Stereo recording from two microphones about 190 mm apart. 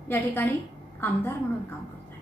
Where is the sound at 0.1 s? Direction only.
10° left (ahead or behind).